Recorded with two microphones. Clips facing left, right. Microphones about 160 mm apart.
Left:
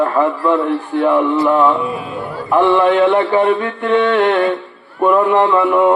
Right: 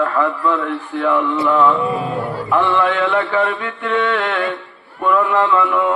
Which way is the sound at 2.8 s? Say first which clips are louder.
Left 5 dB; 35° left (ahead or behind).